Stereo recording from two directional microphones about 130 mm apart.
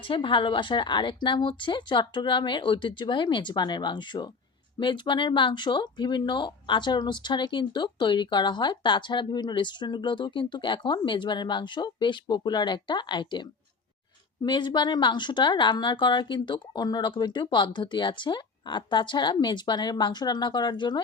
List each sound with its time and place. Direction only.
0.0 s speech: 40° left (ahead or behind)